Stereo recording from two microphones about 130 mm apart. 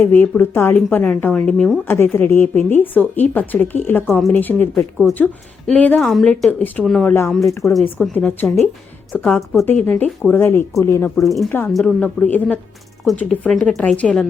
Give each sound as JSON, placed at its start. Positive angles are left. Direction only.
{"t": 0.0, "sound": "speech", "side_deg": 15}
{"t": 6.0, "sound": "a woman's voice", "side_deg": 0}
{"t": 6.5, "sound": "speech", "side_deg": 15}
{"t": 6.8, "sound": "a woman's voice", "side_deg": 0}
{"t": 8.1, "sound": "speech", "side_deg": 10}
{"t": 11.3, "sound": "a woman's voice", "side_deg": 0}